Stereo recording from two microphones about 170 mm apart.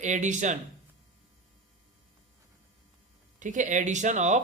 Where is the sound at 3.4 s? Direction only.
45° right (ahead or behind).